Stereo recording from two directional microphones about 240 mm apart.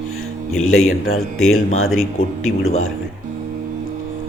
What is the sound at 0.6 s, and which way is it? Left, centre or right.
Speech, left.